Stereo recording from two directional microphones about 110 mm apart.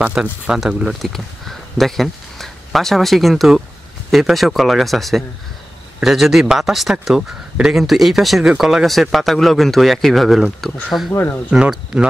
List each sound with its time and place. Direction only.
0.0 s a man's voice: 10° right (ahead or behind)